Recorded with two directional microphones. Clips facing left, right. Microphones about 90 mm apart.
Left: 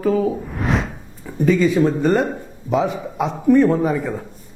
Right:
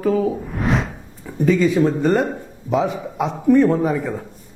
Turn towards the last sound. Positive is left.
turn(degrees=20)  # may be behind; listen again after turning